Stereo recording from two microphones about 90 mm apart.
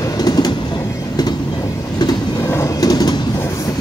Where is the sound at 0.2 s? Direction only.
45° left (ahead or behind).